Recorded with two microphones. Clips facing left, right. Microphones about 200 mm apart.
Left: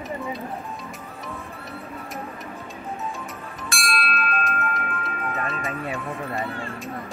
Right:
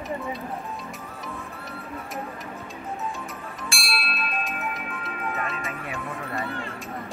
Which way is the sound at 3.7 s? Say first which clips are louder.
Left 7 dB; 5° right (ahead or behind).